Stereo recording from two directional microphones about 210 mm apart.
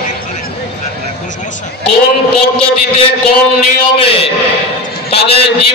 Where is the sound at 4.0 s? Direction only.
25° left (ahead or behind).